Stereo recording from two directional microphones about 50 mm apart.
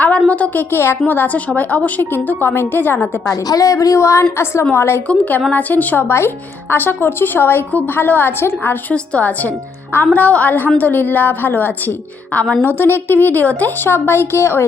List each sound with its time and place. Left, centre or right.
0.3 s a woman's voice: left
0.5 s a woman's voice: left
1.0 s a woman's voice: left
2.0 s a woman's voice: left
3.2 s a woman's voice: left
4.7 s a woman's voice: left
5.0 s a woman's voice: left
6.0 s a woman's voice: left
6.7 s a woman's voice: left
8.9 s a woman's voice: left
13.7 s a woman's voice: left